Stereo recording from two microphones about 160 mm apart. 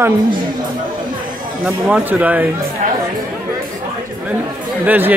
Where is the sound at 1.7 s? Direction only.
10° right (ahead or behind).